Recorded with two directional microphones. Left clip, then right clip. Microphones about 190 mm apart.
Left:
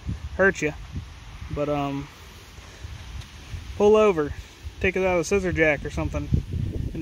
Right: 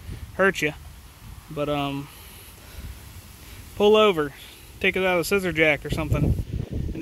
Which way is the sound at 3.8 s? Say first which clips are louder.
Even; centre (ahead or behind).